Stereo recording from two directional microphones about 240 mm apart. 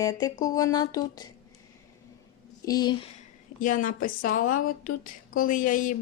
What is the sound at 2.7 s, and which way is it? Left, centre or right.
Speech, centre.